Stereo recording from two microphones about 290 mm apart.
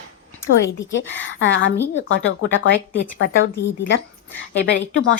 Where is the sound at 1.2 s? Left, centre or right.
Left.